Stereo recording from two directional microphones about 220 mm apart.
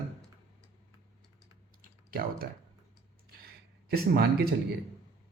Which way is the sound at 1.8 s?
40° right (ahead or behind).